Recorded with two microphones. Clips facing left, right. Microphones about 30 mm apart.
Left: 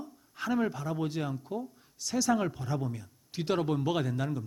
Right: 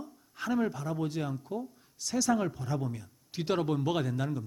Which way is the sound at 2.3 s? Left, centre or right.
Left.